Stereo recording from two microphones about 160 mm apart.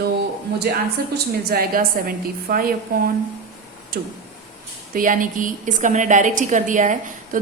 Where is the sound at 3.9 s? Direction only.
70° right (ahead or behind).